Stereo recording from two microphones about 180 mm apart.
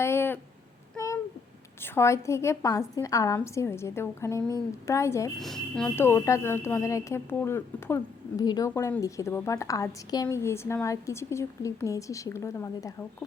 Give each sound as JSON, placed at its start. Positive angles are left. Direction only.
{"t": 0.0, "sound": "a sound", "side_deg": 15}
{"t": 0.9, "sound": "babbling", "side_deg": 20}
{"t": 1.8, "sound": "speech", "side_deg": 15}
{"t": 5.4, "sound": "speech", "side_deg": 0}
{"t": 6.0, "sound": "speech", "side_deg": 15}